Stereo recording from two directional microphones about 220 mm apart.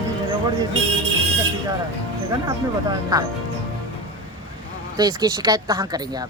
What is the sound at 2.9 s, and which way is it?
Speech, 15° right (ahead or behind).